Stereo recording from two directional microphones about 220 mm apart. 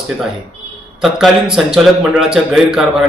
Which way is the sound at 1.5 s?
Centre (ahead or behind).